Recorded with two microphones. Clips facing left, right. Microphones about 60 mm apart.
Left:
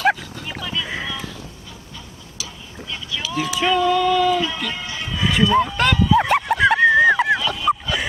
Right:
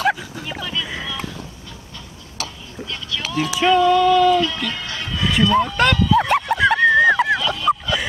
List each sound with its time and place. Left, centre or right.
0.0 s a sound: centre
2.4 s tick-tock: right
3.3 s speech: centre
4.6 s music: centre
5.9 s speech: centre
6.2 s a sound: centre